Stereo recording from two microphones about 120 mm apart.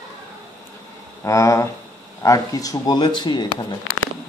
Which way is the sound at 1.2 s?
25° left (ahead or behind).